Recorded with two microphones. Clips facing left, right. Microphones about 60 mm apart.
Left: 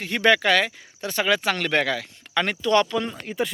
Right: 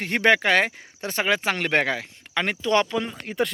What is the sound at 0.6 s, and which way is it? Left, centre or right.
Speech, right.